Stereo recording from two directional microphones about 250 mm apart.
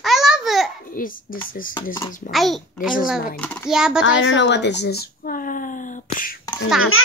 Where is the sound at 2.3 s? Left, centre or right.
Centre.